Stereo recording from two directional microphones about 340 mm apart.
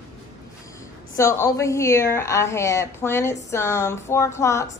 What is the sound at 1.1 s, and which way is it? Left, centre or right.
A woman's voice, centre.